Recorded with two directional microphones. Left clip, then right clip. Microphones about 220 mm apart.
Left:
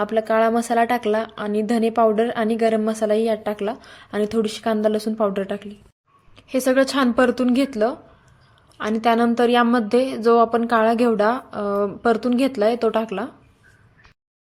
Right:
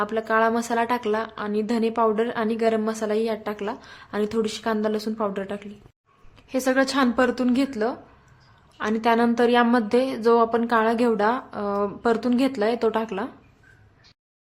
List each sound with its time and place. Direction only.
0.0 s a woman's voice: 15° left (ahead or behind)